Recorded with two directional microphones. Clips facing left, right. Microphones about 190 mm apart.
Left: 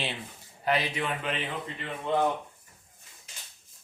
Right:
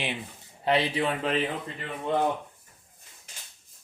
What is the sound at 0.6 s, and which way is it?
Speech, 30° right (ahead or behind).